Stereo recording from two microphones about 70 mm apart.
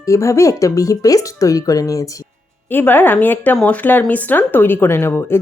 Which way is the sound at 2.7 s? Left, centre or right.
Left.